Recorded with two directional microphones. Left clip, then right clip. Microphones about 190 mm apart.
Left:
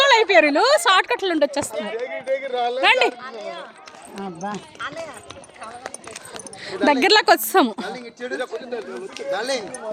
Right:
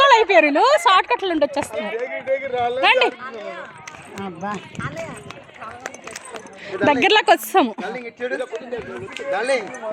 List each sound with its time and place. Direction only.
0.0 s speech: 10° right (ahead or behind)
1.7 s speech: 50° right (ahead or behind)
2.8 s speech: centre (ahead or behind)
3.1 s speech: 55° right (ahead or behind)
4.2 s speech: 20° right (ahead or behind)
4.5 s speech: 60° right (ahead or behind)
6.8 s a woman's voice: 10° left (ahead or behind)
7.9 s speech: 35° right (ahead or behind)